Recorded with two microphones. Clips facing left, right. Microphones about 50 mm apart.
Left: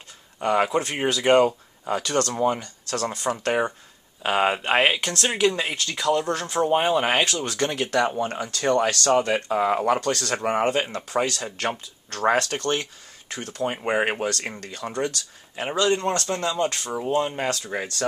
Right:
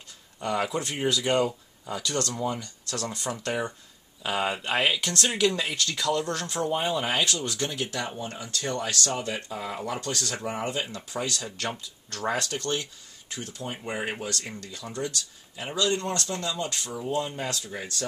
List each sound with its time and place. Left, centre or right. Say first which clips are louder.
0.4 s speech: left 6 dB; left
6.7 s speech: left 7 dB; left
7.7 s speech: left 8 dB; left
8.2 s speech: left 7 dB; left
9.0 s speech: left 10 dB; left
15.6 s speech: left 5 dB; left